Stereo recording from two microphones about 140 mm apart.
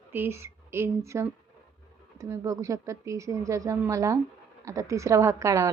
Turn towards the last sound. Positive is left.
turn(degrees=-20)  # may be behind; listen again after turning